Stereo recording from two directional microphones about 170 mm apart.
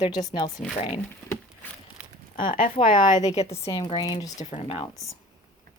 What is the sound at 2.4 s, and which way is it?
Speech, 50° left (ahead or behind).